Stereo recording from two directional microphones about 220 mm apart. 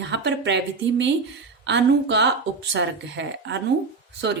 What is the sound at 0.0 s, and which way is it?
A woman's voice, 55° right (ahead or behind).